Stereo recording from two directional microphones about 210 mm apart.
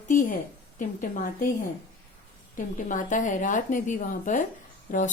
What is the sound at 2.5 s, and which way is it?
Speech, 40° left (ahead or behind).